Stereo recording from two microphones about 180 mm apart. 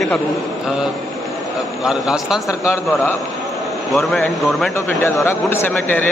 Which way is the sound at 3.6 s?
Centre (ahead or behind).